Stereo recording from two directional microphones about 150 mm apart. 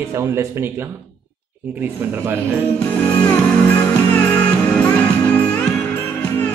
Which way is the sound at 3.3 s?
10° left (ahead or behind).